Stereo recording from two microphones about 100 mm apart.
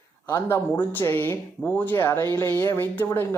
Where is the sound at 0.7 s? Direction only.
20° left (ahead or behind).